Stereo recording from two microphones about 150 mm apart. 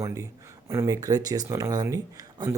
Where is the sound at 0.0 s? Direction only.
20° right (ahead or behind).